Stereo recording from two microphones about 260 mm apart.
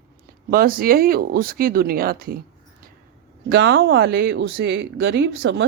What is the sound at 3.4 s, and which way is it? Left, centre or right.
Speech, right.